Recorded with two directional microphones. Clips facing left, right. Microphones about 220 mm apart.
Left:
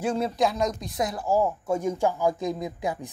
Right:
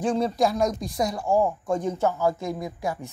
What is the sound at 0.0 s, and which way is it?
Speech, 5° left (ahead or behind).